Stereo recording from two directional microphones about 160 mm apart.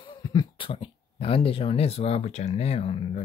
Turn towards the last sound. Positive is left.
turn(degrees=35)  # may be behind; listen again after turning